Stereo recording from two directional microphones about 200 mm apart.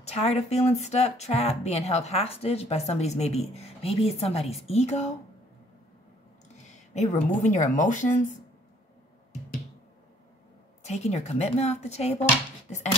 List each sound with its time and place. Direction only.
0.0 s speech: 30° left (ahead or behind)
6.7 s a sound: 35° left (ahead or behind)
7.4 s speech: 35° left (ahead or behind)
10.8 s speech: 35° left (ahead or behind)